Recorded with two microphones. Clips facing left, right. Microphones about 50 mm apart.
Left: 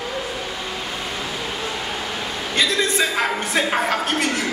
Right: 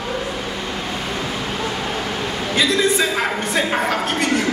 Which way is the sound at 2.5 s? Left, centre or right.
Centre.